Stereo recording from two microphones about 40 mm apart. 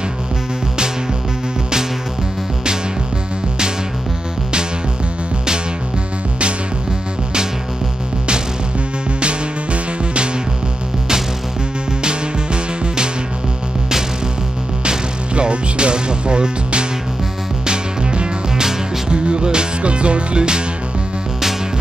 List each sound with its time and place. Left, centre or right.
9.2 s music: right
14.9 s music: right